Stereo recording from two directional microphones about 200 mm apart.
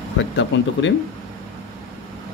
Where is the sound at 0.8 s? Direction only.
65° left (ahead or behind).